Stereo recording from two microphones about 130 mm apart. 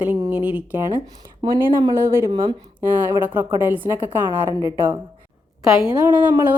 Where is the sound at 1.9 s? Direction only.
20° right (ahead or behind).